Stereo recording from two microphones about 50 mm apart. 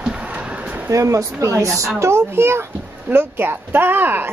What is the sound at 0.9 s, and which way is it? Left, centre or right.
Speech, right.